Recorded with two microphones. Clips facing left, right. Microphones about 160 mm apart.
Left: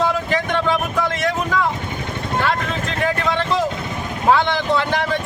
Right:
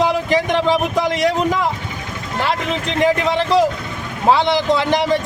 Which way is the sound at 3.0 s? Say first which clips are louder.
Right 4 dB; 15° right (ahead or behind).